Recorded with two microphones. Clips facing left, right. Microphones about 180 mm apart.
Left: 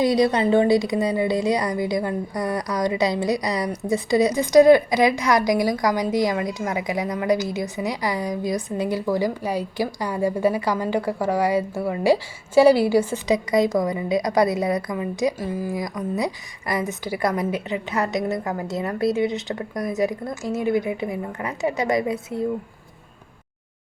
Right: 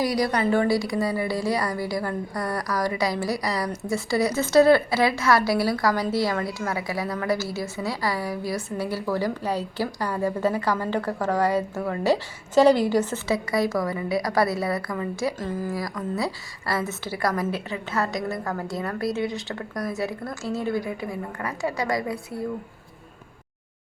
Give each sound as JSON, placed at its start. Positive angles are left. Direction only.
{"t": 0.0, "sound": "a woman's voice", "side_deg": 25}